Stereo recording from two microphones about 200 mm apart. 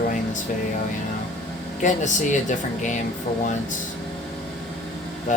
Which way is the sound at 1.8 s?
40° left (ahead or behind).